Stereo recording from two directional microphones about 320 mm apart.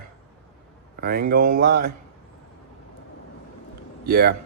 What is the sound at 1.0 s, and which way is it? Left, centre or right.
Speech, right.